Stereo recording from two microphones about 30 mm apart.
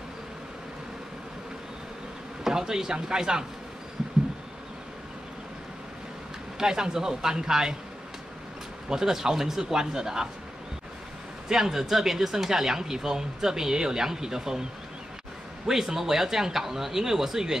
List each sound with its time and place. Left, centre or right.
2.4 s a man's voice: centre
6.6 s a man's voice: right
8.8 s speech: centre
11.4 s a man's voice: centre
15.9 s speech: centre